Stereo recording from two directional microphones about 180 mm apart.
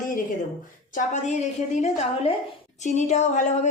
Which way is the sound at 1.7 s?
35° left (ahead or behind).